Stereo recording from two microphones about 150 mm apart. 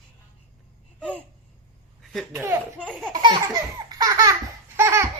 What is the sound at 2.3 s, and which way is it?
Speech, 20° right (ahead or behind).